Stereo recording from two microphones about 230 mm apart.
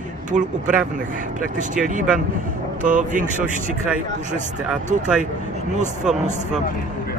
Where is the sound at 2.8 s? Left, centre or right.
Right.